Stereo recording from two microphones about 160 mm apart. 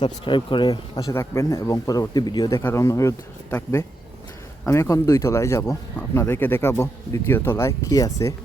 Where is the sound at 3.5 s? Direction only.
10° left (ahead or behind).